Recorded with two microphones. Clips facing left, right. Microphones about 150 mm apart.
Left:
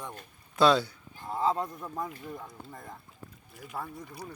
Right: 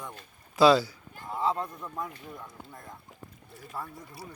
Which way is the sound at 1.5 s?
20° left (ahead or behind).